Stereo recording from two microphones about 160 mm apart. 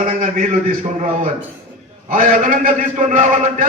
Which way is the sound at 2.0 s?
55° right (ahead or behind).